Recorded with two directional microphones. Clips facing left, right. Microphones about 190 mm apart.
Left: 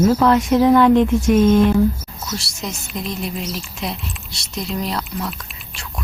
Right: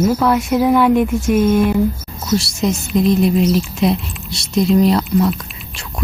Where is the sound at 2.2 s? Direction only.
25° right (ahead or behind).